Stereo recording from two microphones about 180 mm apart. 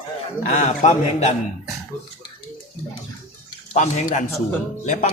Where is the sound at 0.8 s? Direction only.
40° left (ahead or behind).